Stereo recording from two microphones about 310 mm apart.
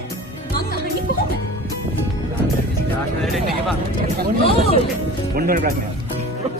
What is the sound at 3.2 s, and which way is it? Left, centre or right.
Speech, centre.